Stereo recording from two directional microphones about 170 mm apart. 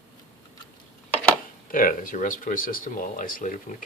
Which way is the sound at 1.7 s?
55° left (ahead or behind).